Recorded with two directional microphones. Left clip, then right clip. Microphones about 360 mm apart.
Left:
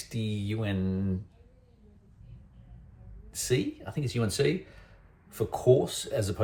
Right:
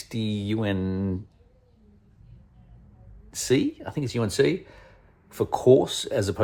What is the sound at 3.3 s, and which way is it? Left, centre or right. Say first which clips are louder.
Speech: right 6 dB; right.